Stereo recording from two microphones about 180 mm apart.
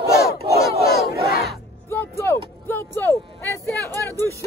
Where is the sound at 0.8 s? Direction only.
60° left (ahead or behind).